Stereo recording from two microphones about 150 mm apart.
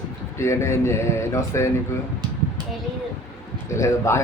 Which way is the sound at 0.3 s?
20° left (ahead or behind).